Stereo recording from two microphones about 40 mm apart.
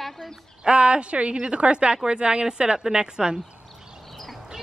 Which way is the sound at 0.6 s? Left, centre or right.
Right.